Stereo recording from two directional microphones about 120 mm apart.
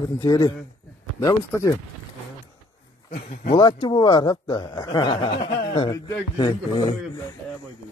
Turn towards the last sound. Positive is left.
turn(degrees=35)  # may be behind; listen again after turning